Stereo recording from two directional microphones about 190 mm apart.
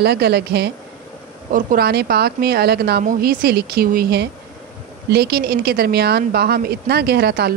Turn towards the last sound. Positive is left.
turn(degrees=-55)  # may be behind; listen again after turning